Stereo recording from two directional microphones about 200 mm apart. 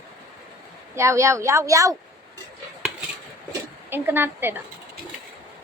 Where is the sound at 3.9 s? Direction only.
10° right (ahead or behind).